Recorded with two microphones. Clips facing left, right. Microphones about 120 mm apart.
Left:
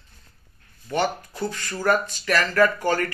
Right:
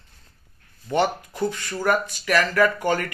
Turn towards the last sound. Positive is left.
turn(degrees=-15)  # may be behind; listen again after turning